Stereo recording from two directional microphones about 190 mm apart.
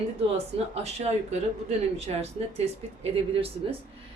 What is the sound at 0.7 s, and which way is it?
Speech, 35° right (ahead or behind).